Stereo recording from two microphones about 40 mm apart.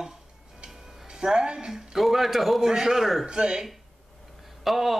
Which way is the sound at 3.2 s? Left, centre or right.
Centre.